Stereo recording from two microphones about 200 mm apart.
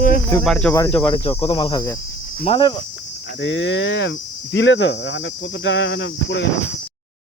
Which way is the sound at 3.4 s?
70° left (ahead or behind).